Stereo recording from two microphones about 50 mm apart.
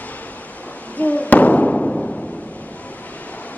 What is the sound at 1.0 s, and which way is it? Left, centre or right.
Fireworks, left.